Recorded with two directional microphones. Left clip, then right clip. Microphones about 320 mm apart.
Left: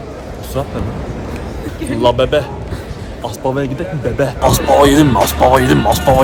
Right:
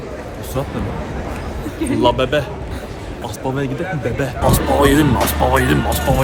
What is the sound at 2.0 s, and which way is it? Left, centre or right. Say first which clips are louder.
Speech: left 4 dB; centre.